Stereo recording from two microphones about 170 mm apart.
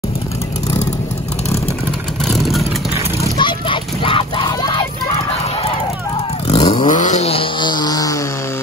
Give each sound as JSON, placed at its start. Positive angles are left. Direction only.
{"t": 2.2, "sound": "vehicle", "side_deg": 0}
{"t": 3.3, "sound": "a sound", "side_deg": 30}
{"t": 6.4, "sound": "vehicle", "side_deg": 30}
{"t": 6.9, "sound": "vehicle", "side_deg": 45}